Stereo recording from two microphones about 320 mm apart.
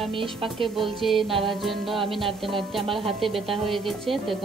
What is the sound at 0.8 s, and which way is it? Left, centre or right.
Speech, centre.